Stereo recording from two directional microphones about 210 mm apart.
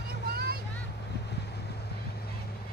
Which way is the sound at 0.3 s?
45° right (ahead or behind).